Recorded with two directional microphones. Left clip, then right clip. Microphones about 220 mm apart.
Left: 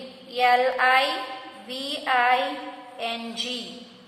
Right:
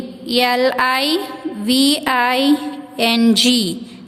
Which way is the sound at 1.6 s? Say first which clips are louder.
Right 14 dB; 45° right (ahead or behind).